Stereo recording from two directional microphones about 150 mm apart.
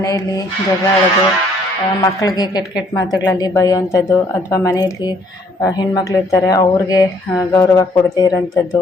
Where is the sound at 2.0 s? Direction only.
25° left (ahead or behind).